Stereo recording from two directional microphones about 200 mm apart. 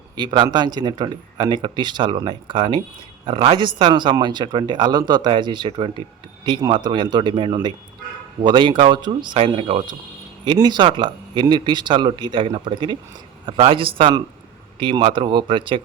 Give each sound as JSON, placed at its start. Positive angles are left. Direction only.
{"t": 0.2, "sound": "speech", "side_deg": -20}